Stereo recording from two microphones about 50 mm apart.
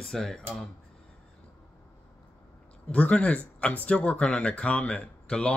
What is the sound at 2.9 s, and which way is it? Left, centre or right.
Speech, left.